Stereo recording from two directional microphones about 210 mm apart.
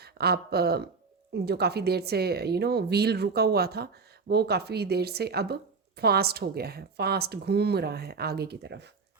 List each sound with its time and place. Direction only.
0.0 s a woman's voice: 50° right (ahead or behind)